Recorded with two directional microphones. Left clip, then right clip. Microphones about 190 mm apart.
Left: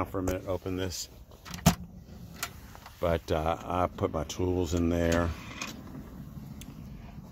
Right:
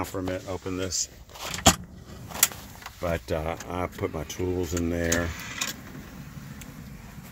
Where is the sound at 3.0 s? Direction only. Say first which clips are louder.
Even; 25° left (ahead or behind).